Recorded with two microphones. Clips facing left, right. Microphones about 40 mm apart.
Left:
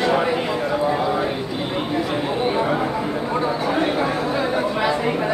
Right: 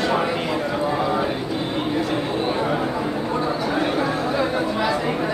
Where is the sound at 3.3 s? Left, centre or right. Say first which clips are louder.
Left 3 dB; centre.